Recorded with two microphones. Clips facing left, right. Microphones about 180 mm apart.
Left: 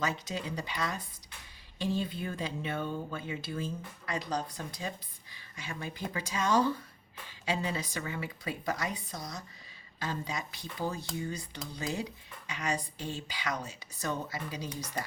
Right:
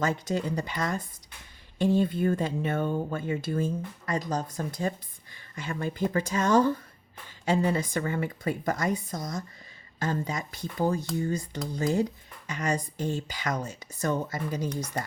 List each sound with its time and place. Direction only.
0.0 s speech: 50° right (ahead or behind)